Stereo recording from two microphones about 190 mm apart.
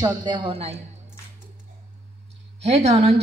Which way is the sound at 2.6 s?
35° right (ahead or behind).